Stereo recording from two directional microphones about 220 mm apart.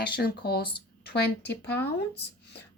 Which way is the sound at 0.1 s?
45° left (ahead or behind).